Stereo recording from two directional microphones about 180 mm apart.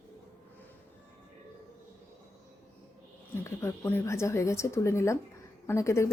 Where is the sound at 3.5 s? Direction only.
15° left (ahead or behind).